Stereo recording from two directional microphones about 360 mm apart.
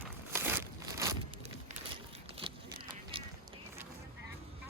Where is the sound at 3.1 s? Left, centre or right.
Centre.